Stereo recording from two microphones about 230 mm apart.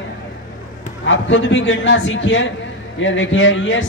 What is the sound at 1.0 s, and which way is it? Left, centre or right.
A woman's voice, left.